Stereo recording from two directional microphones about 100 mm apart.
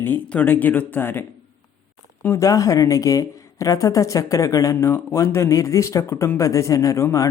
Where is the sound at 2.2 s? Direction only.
30° left (ahead or behind).